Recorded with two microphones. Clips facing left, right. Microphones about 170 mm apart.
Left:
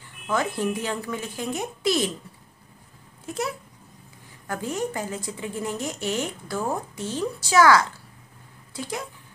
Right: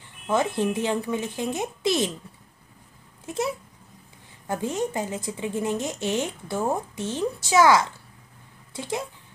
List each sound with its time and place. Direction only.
0.3 s speech: 25° right (ahead or behind)
3.3 s speech: 25° right (ahead or behind)